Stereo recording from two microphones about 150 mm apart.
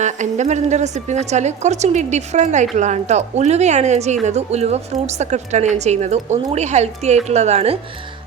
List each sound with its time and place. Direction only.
0.0 s speech: 50° right (ahead or behind)